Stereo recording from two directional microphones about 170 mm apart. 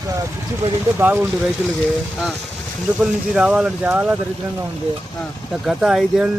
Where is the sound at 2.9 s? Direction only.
Centre (ahead or behind).